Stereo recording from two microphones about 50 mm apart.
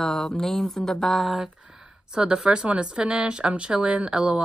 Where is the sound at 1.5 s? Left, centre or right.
Centre.